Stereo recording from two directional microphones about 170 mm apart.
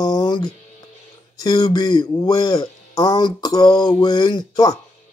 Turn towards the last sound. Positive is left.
turn(degrees=25)  # may be behind; listen again after turning